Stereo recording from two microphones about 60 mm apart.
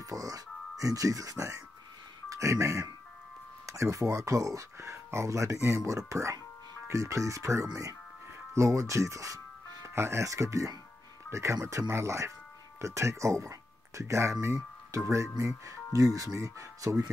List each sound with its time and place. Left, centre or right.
0.0 s speech: right
7.6 s speech: right
8.5 s speech: right